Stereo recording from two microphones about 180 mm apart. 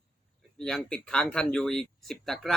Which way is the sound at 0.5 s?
5° left (ahead or behind).